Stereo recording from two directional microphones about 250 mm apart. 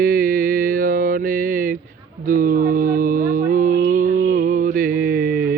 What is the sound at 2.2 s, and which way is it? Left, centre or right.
Music, right.